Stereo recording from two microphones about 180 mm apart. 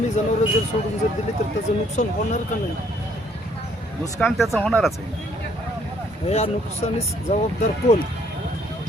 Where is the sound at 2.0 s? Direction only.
45° left (ahead or behind).